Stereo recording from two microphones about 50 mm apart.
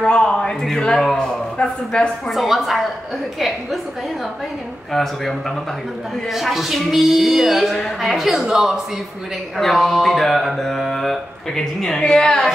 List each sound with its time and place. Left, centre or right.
0.0 s a man's voice: centre
2.2 s mantra: centre
4.9 s mantra: centre
6.3 s mantra: centre
8.5 s a man's voice: centre
9.6 s mantra: centre